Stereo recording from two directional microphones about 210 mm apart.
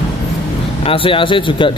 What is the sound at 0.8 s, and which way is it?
Speech, 25° left (ahead or behind).